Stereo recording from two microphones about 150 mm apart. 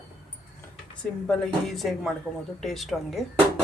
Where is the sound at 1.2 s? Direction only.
5° left (ahead or behind).